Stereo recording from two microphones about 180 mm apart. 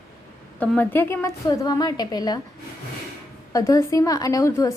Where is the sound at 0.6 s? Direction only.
10° left (ahead or behind).